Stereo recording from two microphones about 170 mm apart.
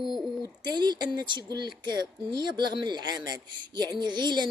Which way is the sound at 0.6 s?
25° right (ahead or behind).